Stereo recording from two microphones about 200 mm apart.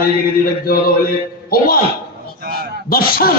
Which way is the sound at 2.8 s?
45° left (ahead or behind).